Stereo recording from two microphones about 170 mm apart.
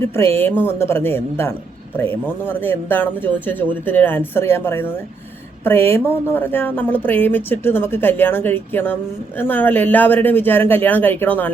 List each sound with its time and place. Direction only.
0.0 s speech: 15° left (ahead or behind)